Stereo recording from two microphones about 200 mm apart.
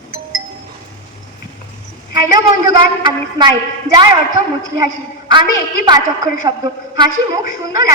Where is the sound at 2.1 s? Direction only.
20° right (ahead or behind).